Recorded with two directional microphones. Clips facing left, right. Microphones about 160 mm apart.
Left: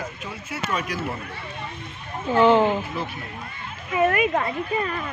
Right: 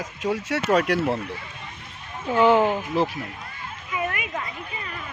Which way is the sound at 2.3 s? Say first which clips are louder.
Left 1 dB; 10° right (ahead or behind).